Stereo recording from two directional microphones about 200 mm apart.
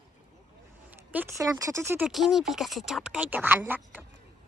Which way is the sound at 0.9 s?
10° right (ahead or behind).